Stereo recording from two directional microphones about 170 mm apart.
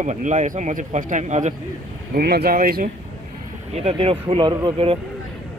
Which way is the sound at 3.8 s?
35° right (ahead or behind).